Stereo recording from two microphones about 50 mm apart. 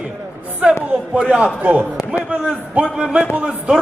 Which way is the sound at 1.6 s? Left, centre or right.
Right.